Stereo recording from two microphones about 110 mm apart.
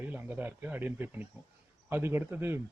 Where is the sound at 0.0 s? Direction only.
15° right (ahead or behind).